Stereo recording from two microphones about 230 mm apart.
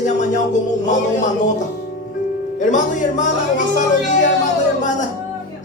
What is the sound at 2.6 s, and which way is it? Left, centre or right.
A woman's voice, left.